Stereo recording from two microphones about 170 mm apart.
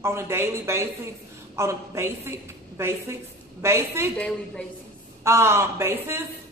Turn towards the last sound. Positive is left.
turn(degrees=-15)  # may be behind; listen again after turning